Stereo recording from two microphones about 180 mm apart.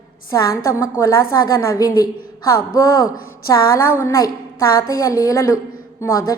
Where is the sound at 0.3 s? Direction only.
20° left (ahead or behind).